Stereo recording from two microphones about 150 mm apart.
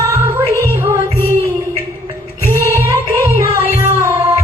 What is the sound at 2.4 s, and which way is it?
Music, 20° right (ahead or behind).